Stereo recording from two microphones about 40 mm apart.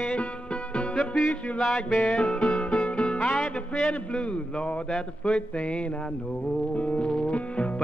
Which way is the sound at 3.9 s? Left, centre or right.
Left.